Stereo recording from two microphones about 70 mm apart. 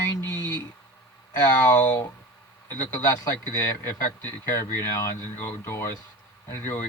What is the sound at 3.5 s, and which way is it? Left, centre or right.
Speech, left.